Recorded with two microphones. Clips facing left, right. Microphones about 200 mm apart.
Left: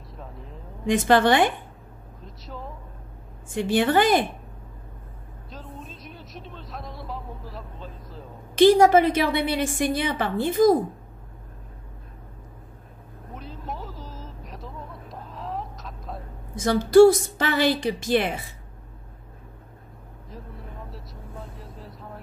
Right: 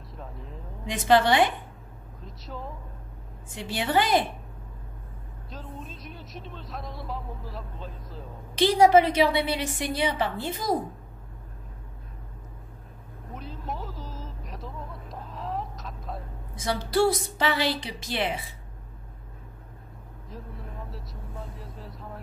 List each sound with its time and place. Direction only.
0.2 s vehicle: centre (ahead or behind)
0.8 s a woman's voice: 50° left (ahead or behind)
2.2 s a man's voice: centre (ahead or behind)
3.5 s a woman's voice: 50° left (ahead or behind)
5.5 s speech: centre (ahead or behind)
8.5 s a woman's voice: 50° left (ahead or behind)
13.3 s vehicle: centre (ahead or behind)
16.5 s a woman's voice: 45° left (ahead or behind)
20.2 s vehicle: centre (ahead or behind)